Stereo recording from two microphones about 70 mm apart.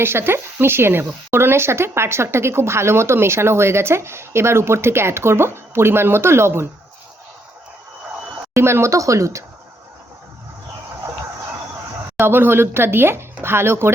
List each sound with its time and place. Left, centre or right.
0.0 s speech: right
8.5 s speech: right
12.1 s speech: right